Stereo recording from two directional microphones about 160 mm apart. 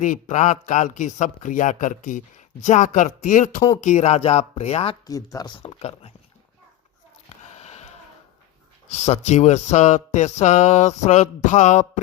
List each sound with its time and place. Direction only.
0.0 s speech: 50° left (ahead or behind)
5.0 s speech: 20° left (ahead or behind)
7.3 s a sound: 40° left (ahead or behind)
8.9 s speech: 45° left (ahead or behind)